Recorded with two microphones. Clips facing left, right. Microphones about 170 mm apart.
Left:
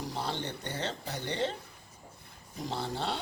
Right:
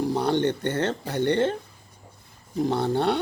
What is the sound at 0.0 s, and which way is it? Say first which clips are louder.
Speech: right 13 dB; 60° right (ahead or behind).